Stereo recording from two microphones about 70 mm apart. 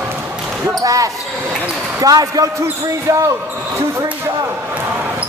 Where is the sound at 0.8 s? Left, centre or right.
Right.